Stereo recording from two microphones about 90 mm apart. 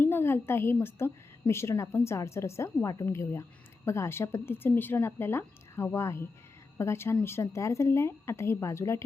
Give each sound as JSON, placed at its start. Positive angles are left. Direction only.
{"t": 0.0, "sound": "a woman's voice", "side_deg": 25}